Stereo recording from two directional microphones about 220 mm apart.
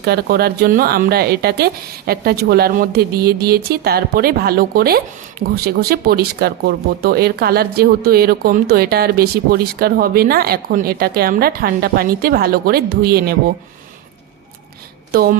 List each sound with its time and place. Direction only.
0.0 s speech: 45° right (ahead or behind)
15.1 s speech: 45° right (ahead or behind)